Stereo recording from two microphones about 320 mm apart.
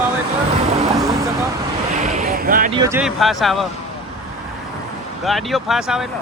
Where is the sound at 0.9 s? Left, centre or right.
Centre.